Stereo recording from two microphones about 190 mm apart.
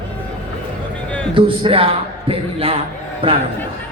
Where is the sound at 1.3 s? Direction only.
30° right (ahead or behind).